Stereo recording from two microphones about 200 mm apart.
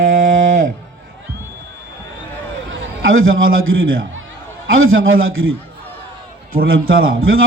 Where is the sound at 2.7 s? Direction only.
80° right.